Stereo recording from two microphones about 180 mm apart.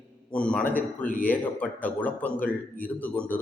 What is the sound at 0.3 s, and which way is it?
A man's voice, 5° left (ahead or behind).